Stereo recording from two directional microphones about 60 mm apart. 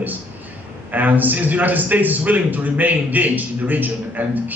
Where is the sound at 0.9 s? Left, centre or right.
Right.